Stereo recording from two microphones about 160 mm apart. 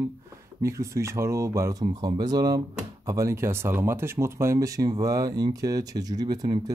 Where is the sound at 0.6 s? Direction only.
20° right (ahead or behind).